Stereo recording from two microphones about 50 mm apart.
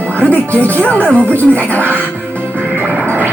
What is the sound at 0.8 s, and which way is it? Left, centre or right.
Speech, left.